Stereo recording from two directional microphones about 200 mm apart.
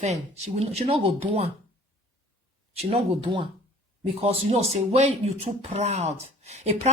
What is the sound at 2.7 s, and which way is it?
Speech, 30° right (ahead or behind).